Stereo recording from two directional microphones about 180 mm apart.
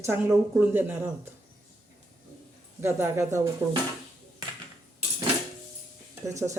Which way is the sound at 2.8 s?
15° right (ahead or behind).